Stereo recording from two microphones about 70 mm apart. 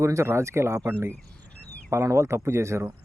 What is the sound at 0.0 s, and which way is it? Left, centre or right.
Speech, right.